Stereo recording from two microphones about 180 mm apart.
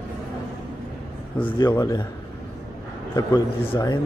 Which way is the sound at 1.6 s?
20° left (ahead or behind).